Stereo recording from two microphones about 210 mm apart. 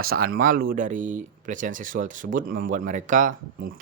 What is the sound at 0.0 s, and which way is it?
Speech, 45° right (ahead or behind).